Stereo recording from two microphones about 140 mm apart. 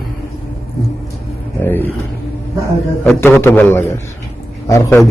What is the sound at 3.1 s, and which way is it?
A man's voice, 15° left (ahead or behind).